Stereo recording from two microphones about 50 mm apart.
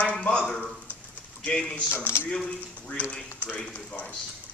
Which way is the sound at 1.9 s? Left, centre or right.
Left.